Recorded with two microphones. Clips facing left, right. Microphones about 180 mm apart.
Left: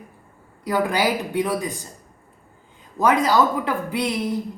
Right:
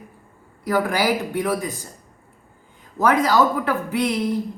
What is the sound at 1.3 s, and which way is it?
Speech, 15° left (ahead or behind).